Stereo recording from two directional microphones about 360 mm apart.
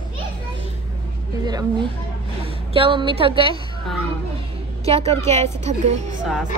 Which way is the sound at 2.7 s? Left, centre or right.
Centre.